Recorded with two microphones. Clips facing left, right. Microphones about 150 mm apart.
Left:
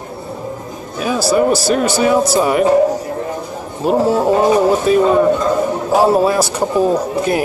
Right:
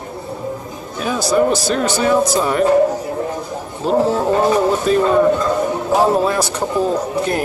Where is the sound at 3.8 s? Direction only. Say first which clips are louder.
Left 2 dB; 10° left (ahead or behind).